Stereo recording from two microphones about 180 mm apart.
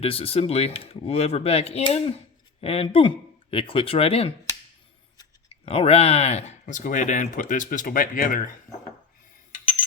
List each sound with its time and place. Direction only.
0.0 s speech: 30° left (ahead or behind)
5.6 s speech: 35° left (ahead or behind)